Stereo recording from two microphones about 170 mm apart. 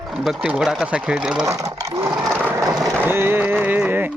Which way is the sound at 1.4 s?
20° right (ahead or behind).